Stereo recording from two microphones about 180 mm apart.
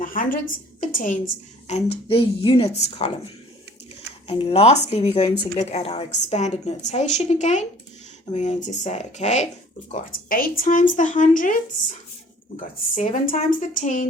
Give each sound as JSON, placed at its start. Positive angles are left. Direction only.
{"t": 0.0, "sound": "a woman's voice", "side_deg": 50}
{"t": 1.6, "sound": "a woman's voice", "side_deg": 35}
{"t": 4.3, "sound": "a woman's voice", "side_deg": 30}
{"t": 10.2, "sound": "speech", "side_deg": 50}
{"t": 12.5, "sound": "speech", "side_deg": 45}